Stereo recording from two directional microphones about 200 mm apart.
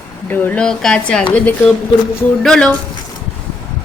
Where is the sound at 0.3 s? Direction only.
10° left (ahead or behind).